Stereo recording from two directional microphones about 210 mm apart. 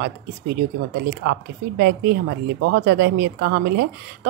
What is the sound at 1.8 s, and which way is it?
Speech, 50° right (ahead or behind).